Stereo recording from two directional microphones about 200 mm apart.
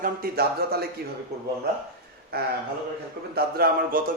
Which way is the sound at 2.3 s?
50° right (ahead or behind).